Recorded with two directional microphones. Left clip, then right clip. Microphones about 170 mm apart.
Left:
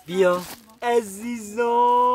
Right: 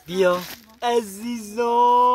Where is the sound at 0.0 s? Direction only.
Centre (ahead or behind).